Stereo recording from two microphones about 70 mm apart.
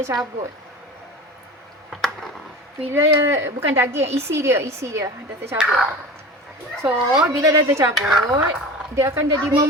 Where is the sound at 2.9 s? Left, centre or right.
Right.